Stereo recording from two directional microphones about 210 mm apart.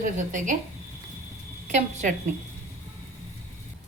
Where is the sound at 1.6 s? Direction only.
35° right (ahead or behind).